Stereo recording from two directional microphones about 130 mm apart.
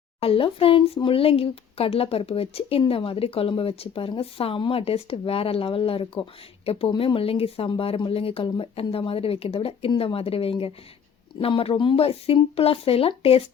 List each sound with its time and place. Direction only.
0.2 s speech: 45° left (ahead or behind)